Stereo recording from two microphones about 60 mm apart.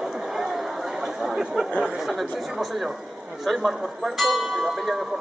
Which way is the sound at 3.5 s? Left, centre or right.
Centre.